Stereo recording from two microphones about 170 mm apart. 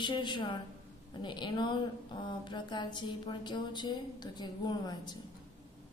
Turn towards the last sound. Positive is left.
turn(degrees=25)  # may be behind; listen again after turning